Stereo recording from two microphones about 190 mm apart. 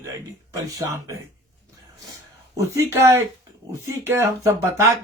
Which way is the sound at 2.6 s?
15° right (ahead or behind).